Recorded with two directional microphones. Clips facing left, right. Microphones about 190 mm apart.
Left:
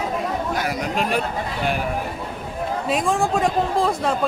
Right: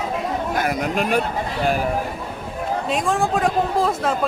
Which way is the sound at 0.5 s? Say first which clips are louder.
Right 2 dB; 50° right (ahead or behind).